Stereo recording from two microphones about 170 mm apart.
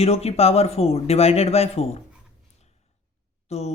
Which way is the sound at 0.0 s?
35° left (ahead or behind).